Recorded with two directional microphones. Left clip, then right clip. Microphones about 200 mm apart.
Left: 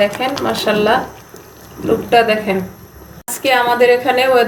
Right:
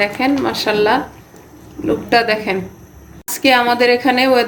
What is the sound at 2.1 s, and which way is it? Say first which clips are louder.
Speech: left 2 dB; 60° right (ahead or behind).